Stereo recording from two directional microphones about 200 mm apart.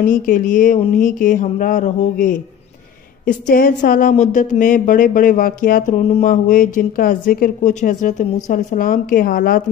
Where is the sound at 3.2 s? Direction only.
45° left (ahead or behind).